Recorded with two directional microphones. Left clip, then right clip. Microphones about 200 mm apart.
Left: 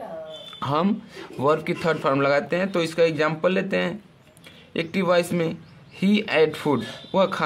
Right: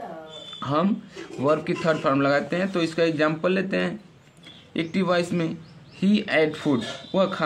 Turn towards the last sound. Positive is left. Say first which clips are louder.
# left 2 dB
turn(degrees=45)  # may be behind; listen again after turning